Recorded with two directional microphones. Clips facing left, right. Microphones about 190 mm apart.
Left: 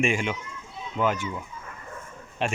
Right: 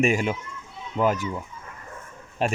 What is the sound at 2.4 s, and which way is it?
Speech, 40° right (ahead or behind).